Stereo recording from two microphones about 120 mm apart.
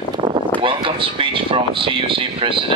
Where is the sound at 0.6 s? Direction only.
45° right (ahead or behind).